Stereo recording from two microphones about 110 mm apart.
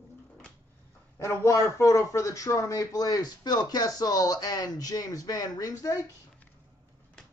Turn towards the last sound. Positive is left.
turn(degrees=30)  # may be behind; listen again after turning